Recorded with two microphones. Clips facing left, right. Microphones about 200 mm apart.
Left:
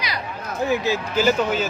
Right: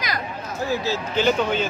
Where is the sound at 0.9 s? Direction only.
5° left (ahead or behind).